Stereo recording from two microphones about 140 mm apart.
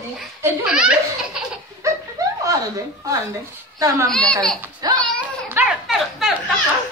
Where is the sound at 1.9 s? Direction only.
25° right (ahead or behind).